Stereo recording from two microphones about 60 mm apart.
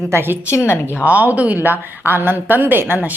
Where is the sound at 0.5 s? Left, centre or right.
Left.